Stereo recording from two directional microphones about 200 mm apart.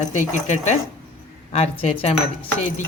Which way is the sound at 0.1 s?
35° left (ahead or behind).